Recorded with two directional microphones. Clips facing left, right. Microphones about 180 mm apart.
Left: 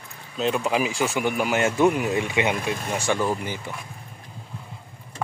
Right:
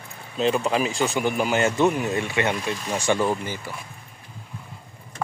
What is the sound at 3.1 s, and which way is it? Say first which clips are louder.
Speech: right 2 dB; centre (ahead or behind).